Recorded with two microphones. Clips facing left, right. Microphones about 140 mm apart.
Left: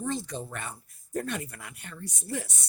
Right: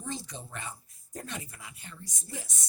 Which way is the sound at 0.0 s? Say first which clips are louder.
Left 7 dB; 60° left (ahead or behind).